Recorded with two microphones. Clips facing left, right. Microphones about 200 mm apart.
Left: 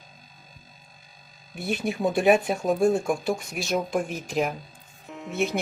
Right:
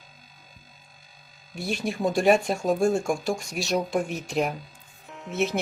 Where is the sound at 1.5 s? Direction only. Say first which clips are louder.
Left 1 dB; 5° left (ahead or behind).